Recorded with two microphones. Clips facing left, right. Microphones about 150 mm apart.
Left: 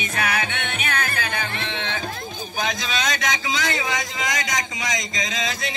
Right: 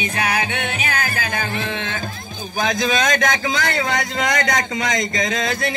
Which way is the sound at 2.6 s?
50° right (ahead or behind).